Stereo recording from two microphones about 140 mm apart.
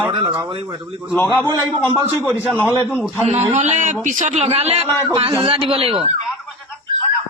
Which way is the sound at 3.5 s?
55° right (ahead or behind).